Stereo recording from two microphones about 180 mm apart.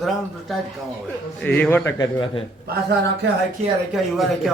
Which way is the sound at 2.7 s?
65° right (ahead or behind).